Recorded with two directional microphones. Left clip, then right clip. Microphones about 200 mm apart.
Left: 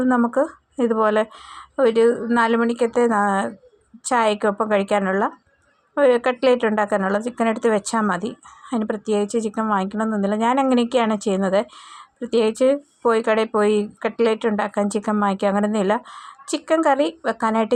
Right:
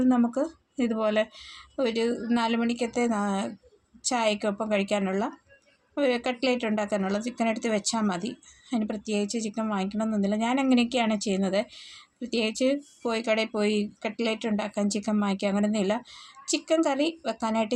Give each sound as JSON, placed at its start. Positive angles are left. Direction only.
{"t": 0.0, "sound": "speech", "side_deg": 20}